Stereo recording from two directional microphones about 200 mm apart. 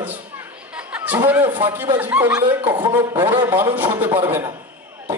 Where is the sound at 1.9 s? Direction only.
10° right (ahead or behind).